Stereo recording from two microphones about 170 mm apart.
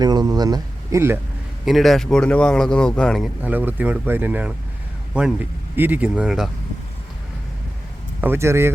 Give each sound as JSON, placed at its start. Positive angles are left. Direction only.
{"t": 0.0, "sound": "speech", "side_deg": -25}
{"t": 1.6, "sound": "speech", "side_deg": 0}
{"t": 3.4, "sound": "speech", "side_deg": -10}
{"t": 8.2, "sound": "speech", "side_deg": -15}